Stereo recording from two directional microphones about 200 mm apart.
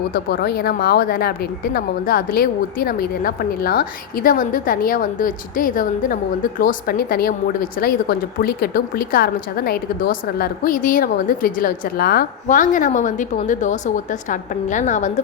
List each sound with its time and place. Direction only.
0.1 s a woman's voice: 50° left (ahead or behind)